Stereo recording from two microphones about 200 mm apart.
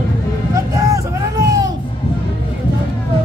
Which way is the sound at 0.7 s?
15° right (ahead or behind).